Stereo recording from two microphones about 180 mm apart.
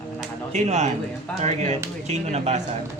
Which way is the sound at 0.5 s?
40° right (ahead or behind).